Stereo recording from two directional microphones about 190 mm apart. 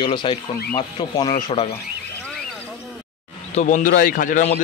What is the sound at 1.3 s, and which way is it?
Speech, 30° left (ahead or behind).